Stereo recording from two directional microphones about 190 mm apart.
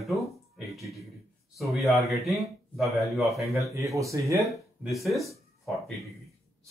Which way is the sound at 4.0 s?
15° right (ahead or behind).